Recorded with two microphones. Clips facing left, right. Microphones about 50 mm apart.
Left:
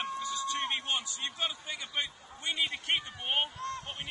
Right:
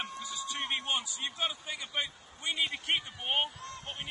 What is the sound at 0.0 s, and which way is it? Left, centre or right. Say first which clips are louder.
A man's voice: left 5 dB; centre.